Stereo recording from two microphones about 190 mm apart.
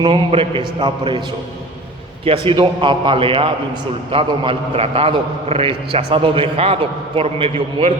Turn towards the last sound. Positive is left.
turn(degrees=-30)  # may be behind; listen again after turning